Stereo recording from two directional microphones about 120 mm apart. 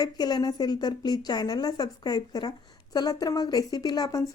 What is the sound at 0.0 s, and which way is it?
A woman's voice, 35° left (ahead or behind).